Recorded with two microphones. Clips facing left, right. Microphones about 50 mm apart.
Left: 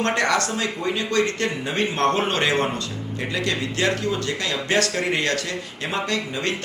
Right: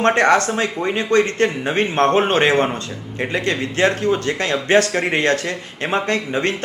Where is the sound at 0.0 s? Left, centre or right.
Right.